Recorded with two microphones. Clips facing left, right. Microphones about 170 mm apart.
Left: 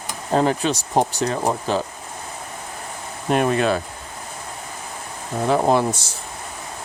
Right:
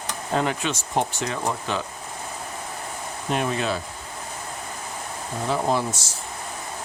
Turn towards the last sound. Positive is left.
turn(degrees=60)  # may be behind; listen again after turning